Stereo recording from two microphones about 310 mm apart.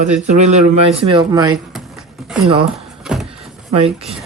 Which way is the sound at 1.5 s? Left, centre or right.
Centre.